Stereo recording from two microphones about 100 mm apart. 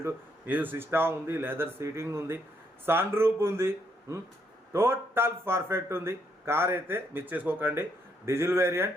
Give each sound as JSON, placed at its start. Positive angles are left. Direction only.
{"t": 0.0, "sound": "speech", "side_deg": -20}